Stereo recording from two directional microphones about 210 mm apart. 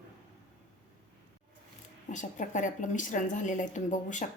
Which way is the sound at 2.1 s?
35° left (ahead or behind).